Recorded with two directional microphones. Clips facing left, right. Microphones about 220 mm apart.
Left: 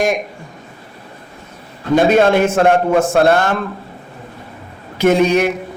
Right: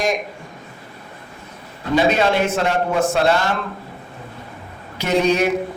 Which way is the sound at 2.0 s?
50° left (ahead or behind).